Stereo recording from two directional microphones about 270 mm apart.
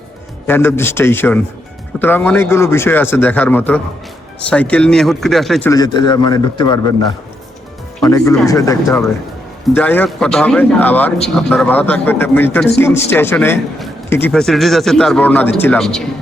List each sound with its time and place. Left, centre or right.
0.4 s a man's voice: centre
8.0 s a man's voice: centre